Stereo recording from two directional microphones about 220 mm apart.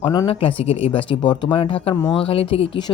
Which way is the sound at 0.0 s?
20° left (ahead or behind).